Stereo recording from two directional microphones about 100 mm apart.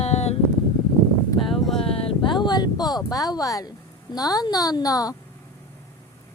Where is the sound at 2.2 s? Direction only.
50° left (ahead or behind).